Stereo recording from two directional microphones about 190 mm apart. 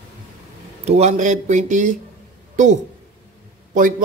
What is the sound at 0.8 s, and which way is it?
Speech, 35° right (ahead or behind).